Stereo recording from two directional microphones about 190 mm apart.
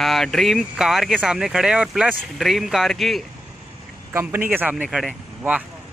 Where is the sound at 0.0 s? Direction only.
Centre (ahead or behind).